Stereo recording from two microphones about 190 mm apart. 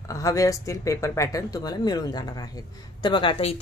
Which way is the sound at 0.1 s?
15° left (ahead or behind).